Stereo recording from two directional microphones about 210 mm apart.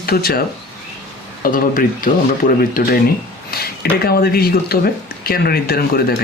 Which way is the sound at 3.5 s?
50° left (ahead or behind).